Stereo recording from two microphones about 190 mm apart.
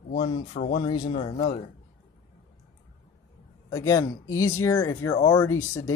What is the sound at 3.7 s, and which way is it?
Speech, 20° left (ahead or behind).